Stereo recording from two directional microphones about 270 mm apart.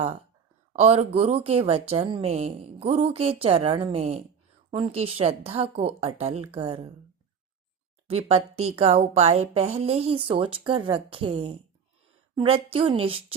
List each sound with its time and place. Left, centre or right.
0.7 s a woman's voice: right
8.0 s a woman's voice: right